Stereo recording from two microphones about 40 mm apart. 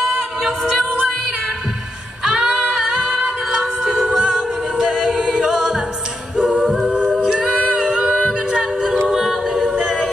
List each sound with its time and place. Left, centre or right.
0.4 s a capella: centre
2.4 s female singing: right
2.7 s music: centre
4.7 s a capella: centre
5.4 s music: centre
6.9 s a capella: right
7.7 s singing: centre
9.1 s a capella: centre